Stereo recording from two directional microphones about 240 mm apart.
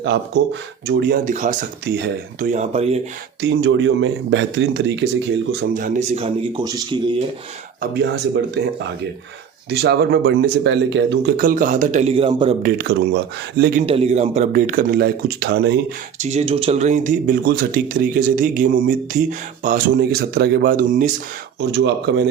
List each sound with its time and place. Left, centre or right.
0.0 s a man's voice: right
3.5 s a man's voice: right
5.5 s speech: right
7.8 s a man's voice: right
12.6 s speech: right
13.8 s speech: right
16.1 s speech: right
21.6 s a man's voice: right